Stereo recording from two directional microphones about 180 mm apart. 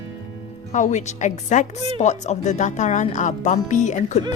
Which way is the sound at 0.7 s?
40° left (ahead or behind).